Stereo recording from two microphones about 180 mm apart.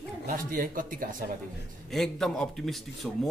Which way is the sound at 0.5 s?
50° right (ahead or behind).